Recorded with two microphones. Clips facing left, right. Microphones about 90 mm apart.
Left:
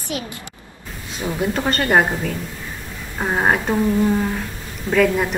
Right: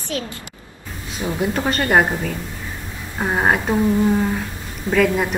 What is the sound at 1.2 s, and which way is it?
A woman's voice, 5° right (ahead or behind).